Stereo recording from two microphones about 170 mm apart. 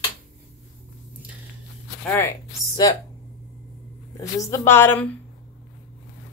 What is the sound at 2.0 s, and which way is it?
Speech, 15° left (ahead or behind).